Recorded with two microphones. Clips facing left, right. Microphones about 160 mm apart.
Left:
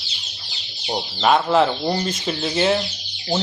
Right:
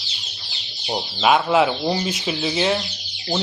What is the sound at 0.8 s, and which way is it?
Speech, 5° right (ahead or behind).